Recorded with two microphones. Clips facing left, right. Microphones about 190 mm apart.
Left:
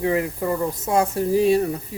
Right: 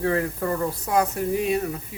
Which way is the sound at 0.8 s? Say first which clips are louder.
Left 3 dB; 25° left (ahead or behind).